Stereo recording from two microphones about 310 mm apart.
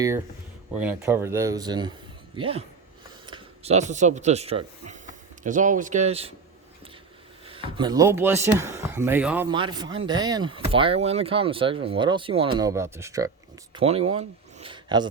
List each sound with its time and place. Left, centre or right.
0.8 s a man's voice: centre
7.4 s speech: centre